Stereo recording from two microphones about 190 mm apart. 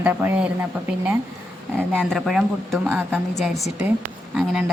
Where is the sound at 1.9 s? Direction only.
Centre (ahead or behind).